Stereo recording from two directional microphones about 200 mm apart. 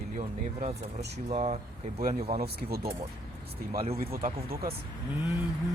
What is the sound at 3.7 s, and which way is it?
Speech, 30° right (ahead or behind).